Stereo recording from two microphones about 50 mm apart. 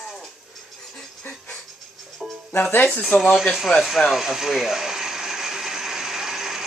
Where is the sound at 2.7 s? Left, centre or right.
Left.